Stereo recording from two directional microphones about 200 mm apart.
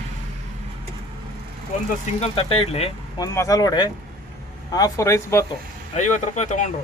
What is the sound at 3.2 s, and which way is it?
Speech, 15° left (ahead or behind).